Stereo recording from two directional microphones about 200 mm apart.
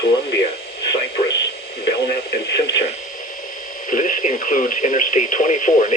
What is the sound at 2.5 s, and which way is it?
Radio, 60° left (ahead or behind).